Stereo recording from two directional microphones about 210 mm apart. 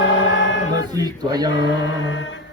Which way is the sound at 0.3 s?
60° left (ahead or behind).